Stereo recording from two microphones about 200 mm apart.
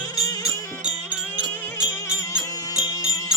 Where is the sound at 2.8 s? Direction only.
20° left (ahead or behind).